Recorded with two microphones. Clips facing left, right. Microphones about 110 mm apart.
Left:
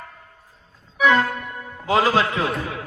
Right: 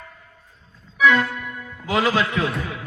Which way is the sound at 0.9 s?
35° left (ahead or behind).